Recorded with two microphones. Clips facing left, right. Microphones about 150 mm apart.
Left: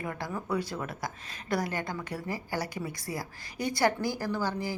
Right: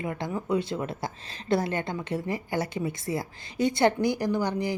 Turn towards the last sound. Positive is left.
turn(degrees=-20)  # may be behind; listen again after turning